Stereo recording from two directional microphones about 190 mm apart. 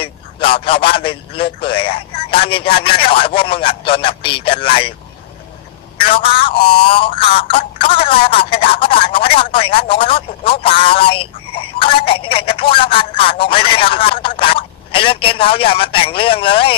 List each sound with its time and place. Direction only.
0.0 s a man's voice: 30° left (ahead or behind)
5.9 s speech: 30° left (ahead or behind)